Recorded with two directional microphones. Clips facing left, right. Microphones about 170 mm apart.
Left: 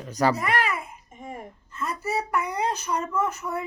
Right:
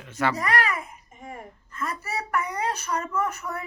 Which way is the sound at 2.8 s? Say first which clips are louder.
Left 1 dB; 10° left (ahead or behind).